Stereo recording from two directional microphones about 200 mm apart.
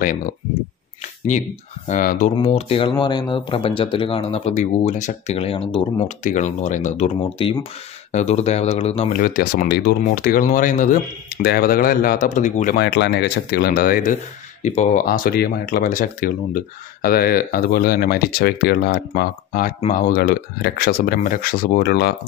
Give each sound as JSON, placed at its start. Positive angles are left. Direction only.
{"t": 1.9, "sound": "speech", "side_deg": 40}
{"t": 2.3, "sound": "speech", "side_deg": 30}
{"t": 8.1, "sound": "speech", "side_deg": 35}
{"t": 9.1, "sound": "speech", "side_deg": 45}
{"t": 12.7, "sound": "speech", "side_deg": 55}